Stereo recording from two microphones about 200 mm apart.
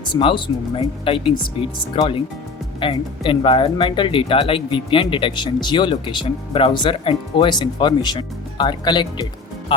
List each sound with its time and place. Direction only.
0.0 s speech: 25° left (ahead or behind)